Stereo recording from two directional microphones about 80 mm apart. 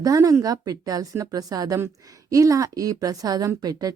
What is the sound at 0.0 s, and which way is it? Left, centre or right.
Speech, right.